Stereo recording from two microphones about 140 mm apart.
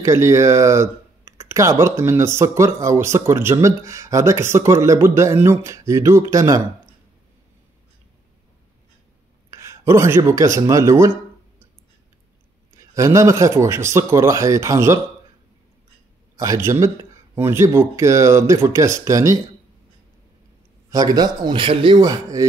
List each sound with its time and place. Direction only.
0.0 s speech: 20° right (ahead or behind)
9.5 s speech: 20° right (ahead or behind)
12.7 s speech: 20° right (ahead or behind)
16.3 s speech: 20° right (ahead or behind)
20.9 s speech: 25° right (ahead or behind)